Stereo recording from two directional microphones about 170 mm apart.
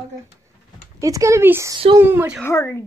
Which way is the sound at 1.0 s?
20° right (ahead or behind).